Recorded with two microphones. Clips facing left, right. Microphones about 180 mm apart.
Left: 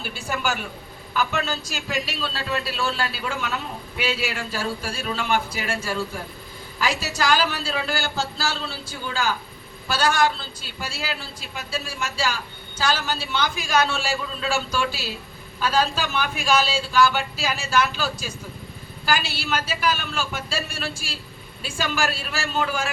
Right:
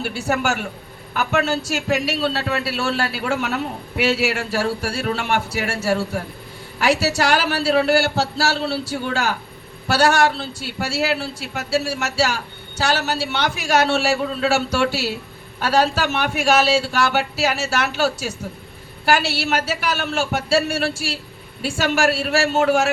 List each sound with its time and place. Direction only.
0.0 s a man's voice: 70° right (ahead or behind)